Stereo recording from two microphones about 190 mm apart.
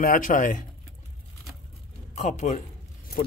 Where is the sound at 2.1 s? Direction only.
35° left (ahead or behind).